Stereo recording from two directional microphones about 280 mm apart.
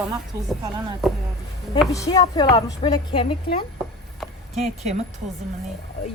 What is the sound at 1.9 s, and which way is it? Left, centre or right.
A woman's voice, centre.